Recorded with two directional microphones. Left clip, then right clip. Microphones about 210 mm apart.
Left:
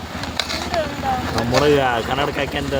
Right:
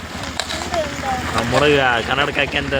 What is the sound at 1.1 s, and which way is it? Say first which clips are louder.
Vehicle: even; 35° left (ahead or behind).